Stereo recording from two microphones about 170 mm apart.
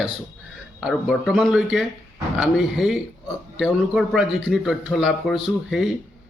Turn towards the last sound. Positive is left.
turn(degrees=0)  # may be behind; listen again after turning